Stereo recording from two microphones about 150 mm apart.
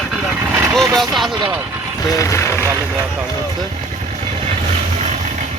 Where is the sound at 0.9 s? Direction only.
Centre (ahead or behind).